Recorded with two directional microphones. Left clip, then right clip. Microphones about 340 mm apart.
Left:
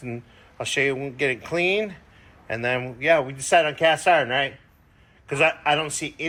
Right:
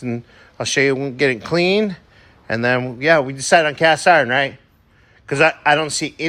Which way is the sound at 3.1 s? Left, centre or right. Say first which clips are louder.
Right 5 dB; right.